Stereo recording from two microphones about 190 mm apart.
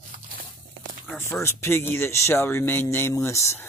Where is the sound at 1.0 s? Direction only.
10° left (ahead or behind).